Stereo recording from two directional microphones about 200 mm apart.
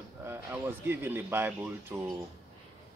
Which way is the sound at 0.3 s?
10° right (ahead or behind).